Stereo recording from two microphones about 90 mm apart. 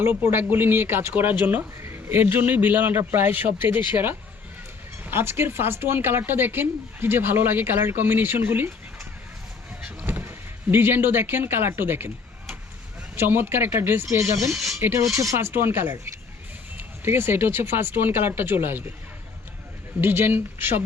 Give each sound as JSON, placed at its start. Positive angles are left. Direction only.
{"t": 0.1, "sound": "a man's voice", "side_deg": -20}
{"t": 9.8, "sound": "a sound", "side_deg": -20}
{"t": 13.1, "sound": "speech", "side_deg": -25}
{"t": 14.5, "sound": "speech", "side_deg": -5}
{"t": 14.8, "sound": "speech", "side_deg": -30}
{"t": 20.0, "sound": "speech", "side_deg": -25}